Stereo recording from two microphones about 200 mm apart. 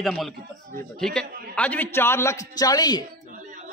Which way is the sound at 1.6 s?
10° left (ahead or behind).